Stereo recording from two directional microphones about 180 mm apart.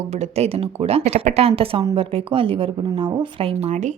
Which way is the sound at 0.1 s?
35° right (ahead or behind).